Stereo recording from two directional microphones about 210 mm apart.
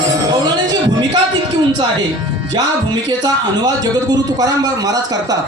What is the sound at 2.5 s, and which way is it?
A man's voice, 20° right (ahead or behind).